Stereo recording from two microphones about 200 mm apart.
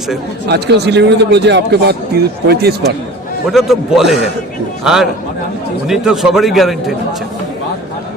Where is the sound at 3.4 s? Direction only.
Centre (ahead or behind).